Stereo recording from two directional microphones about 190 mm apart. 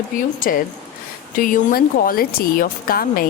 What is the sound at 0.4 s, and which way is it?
Speech, 50° left (ahead or behind).